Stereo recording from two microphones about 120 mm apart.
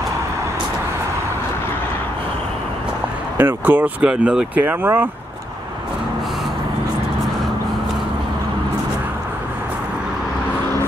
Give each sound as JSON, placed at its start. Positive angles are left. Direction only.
{"t": 3.3, "sound": "speech", "side_deg": -15}